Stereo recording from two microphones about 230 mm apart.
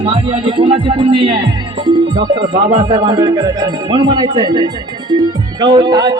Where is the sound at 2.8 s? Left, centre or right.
Centre.